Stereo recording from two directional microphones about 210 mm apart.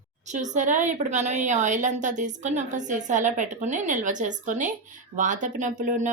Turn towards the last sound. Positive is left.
turn(degrees=-35)  # may be behind; listen again after turning